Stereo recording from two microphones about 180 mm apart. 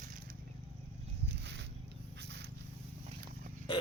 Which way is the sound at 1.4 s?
75° right (ahead or behind).